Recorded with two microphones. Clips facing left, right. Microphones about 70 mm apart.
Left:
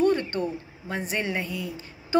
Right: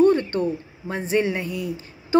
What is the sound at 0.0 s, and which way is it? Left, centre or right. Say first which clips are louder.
Speech: right 5 dB; right.